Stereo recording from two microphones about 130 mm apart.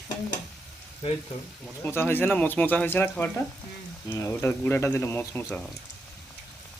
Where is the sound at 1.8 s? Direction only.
15° left (ahead or behind).